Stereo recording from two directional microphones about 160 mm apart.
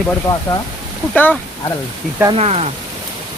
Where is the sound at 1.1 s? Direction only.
10° left (ahead or behind).